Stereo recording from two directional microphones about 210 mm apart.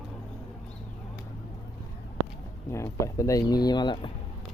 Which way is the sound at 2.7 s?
15° left (ahead or behind).